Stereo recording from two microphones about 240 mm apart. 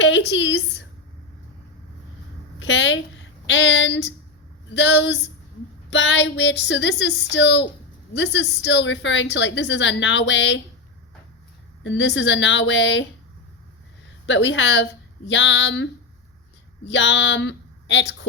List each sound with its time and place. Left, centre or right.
0.0 s a woman's voice: left
2.6 s a woman's voice: left
11.8 s a woman's voice: left
14.3 s a woman's voice: left